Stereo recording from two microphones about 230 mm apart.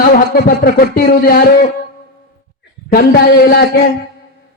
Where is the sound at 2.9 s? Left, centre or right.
Left.